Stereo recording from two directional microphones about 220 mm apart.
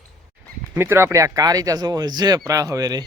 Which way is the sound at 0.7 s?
10° right (ahead or behind).